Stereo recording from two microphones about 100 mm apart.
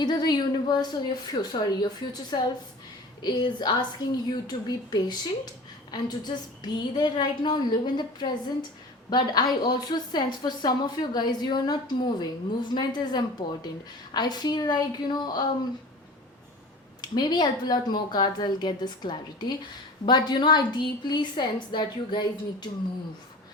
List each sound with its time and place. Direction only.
0.0 s a woman's voice: 45° left (ahead or behind)
17.0 s a woman's voice: 45° left (ahead or behind)